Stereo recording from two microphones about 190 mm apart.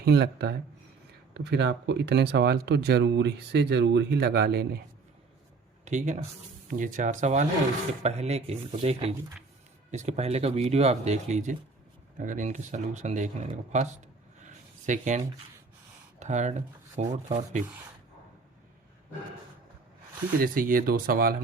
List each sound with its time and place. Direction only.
0.0 s speech: 60° right (ahead or behind)
5.8 s speech: 40° right (ahead or behind)
14.4 s a sound: 40° right (ahead or behind)
16.2 s speech: 40° right (ahead or behind)
20.4 s speech: 45° right (ahead or behind)